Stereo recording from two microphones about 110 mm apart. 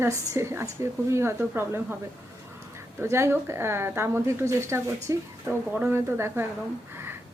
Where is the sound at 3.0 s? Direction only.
25° right (ahead or behind).